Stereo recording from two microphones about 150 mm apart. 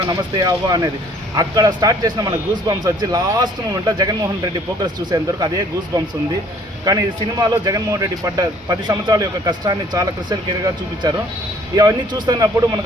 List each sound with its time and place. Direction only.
0.1 s speech: 25° right (ahead or behind)